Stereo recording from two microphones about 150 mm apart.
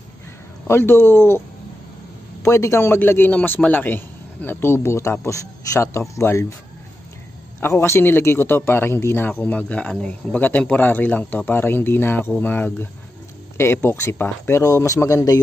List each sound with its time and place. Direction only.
0.7 s speech: 15° left (ahead or behind)
2.4 s speech: 20° left (ahead or behind)
7.6 s speech: 20° left (ahead or behind)